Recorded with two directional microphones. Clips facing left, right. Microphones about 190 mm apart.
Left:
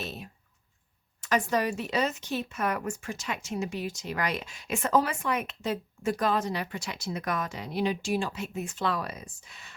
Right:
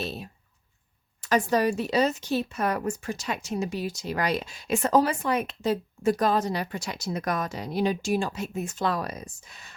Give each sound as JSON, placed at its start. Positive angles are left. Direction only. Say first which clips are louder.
{"t": 0.0, "sound": "speech", "louder": "right 5 dB", "side_deg": -30}